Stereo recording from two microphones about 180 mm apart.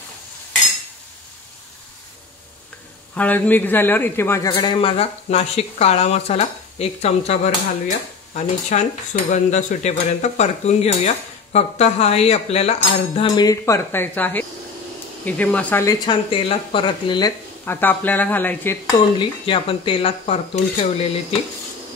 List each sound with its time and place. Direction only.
3.2 s a man's voice: 10° left (ahead or behind); by 13.3 s 35° left (ahead or behind)
13.3 s speech: 20° left (ahead or behind)
16.3 s a man's voice: 30° left (ahead or behind)
17.6 s speech: 10° left (ahead or behind)
19.1 s speech: 30° left (ahead or behind)